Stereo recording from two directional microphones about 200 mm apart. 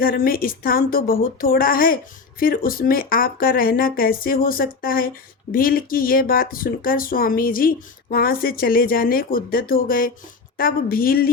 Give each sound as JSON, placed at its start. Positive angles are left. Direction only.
{"t": 0.0, "sound": "speech", "side_deg": 45}